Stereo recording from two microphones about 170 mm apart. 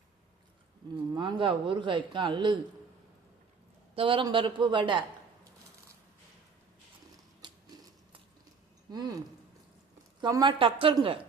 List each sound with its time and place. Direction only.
1.1 s speech: 30° right (ahead or behind)
3.9 s speech: 30° right (ahead or behind)
7.4 s a sound: 25° right (ahead or behind)
8.9 s speech: 25° right (ahead or behind)
10.2 s speech: 25° right (ahead or behind)